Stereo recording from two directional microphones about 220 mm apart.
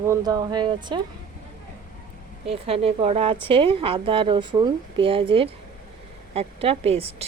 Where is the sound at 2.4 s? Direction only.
25° right (ahead or behind).